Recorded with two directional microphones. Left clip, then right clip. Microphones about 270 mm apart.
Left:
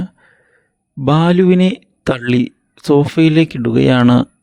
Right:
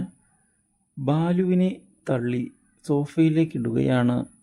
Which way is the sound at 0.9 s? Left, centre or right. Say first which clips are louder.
Left 12 dB; left.